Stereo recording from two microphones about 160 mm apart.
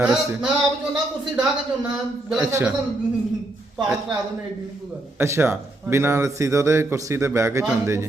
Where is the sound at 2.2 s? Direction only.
5° right (ahead or behind).